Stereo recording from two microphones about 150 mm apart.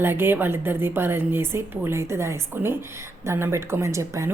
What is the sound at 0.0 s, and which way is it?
Speech, 15° right (ahead or behind).